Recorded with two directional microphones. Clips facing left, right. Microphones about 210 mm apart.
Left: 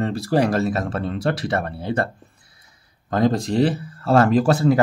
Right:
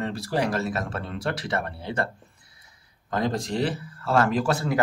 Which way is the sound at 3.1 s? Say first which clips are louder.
Left 7 dB; 35° left (ahead or behind).